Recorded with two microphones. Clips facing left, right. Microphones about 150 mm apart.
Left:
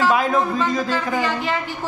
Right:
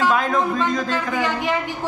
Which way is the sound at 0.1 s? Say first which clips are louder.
Left 1 dB; 5° left (ahead or behind).